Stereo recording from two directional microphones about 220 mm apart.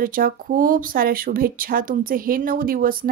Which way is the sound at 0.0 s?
40° right (ahead or behind).